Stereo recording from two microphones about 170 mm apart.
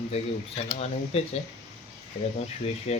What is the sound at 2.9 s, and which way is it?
Speech, 35° left (ahead or behind).